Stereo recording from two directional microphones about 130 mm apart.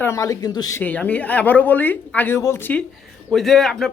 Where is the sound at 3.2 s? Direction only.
Centre (ahead or behind).